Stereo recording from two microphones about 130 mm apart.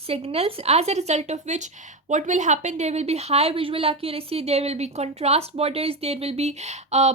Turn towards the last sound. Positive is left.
turn(degrees=-60)  # may be behind; listen again after turning